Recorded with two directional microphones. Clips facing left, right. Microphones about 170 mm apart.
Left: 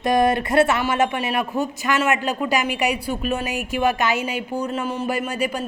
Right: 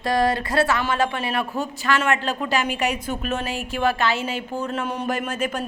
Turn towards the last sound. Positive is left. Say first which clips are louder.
# left 2 dB
turn(degrees=10)  # may be behind; listen again after turning